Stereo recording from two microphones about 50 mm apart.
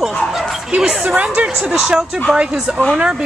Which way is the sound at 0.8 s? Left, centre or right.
Centre.